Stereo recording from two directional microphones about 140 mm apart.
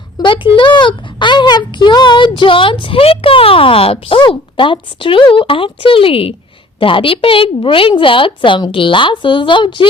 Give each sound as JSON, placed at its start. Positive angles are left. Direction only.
{"t": 0.2, "sound": "speech", "side_deg": 35}